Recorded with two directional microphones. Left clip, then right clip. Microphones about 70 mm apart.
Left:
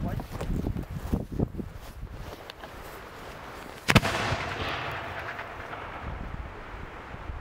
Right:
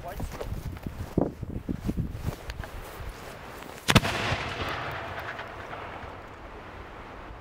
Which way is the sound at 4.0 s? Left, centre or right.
Left.